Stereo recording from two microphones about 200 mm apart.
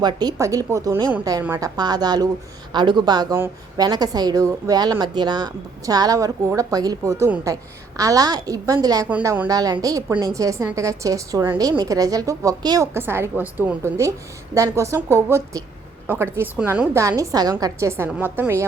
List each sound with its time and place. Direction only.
0.0 s a woman's voice: 20° right (ahead or behind)